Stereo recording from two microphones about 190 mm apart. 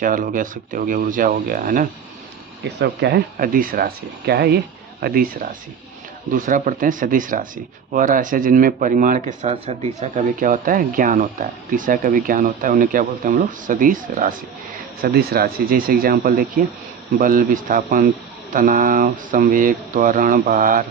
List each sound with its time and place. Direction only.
0.0 s speech: 45° right (ahead or behind)
2.6 s speech: 65° right (ahead or behind); by 20.8 s 45° right (ahead or behind)